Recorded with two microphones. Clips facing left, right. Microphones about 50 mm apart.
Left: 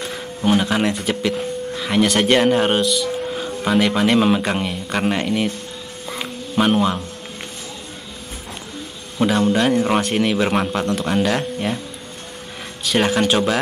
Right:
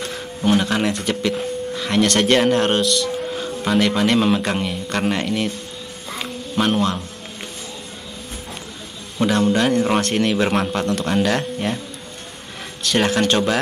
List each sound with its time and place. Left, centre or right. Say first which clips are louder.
0.0 s speech: even; centre
6.0 s music: left 1 dB; centre
9.2 s a man's voice: left 1 dB; centre
12.8 s a man's voice: even; centre